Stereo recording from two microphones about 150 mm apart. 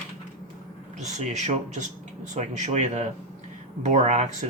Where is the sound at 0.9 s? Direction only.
50° right (ahead or behind).